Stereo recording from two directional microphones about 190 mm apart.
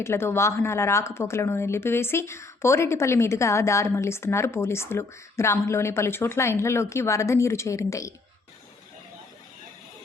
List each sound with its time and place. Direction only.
0.0 s a woman's voice: 15° left (ahead or behind)